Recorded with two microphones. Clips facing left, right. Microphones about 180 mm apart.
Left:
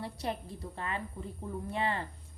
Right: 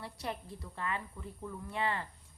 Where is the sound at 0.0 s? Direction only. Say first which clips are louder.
Left 4 dB; 25° left (ahead or behind).